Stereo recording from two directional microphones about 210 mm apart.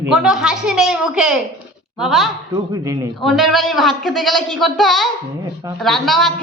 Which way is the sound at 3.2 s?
Centre (ahead or behind).